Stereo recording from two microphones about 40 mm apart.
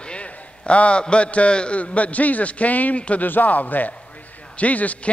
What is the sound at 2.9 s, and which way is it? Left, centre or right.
Speech, left.